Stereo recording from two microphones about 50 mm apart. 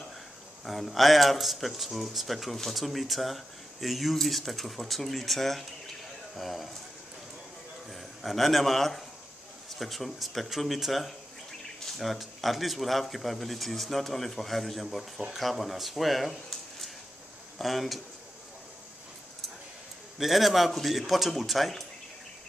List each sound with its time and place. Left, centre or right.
0.7 s speech: centre
7.9 s speech: centre
20.2 s speech: centre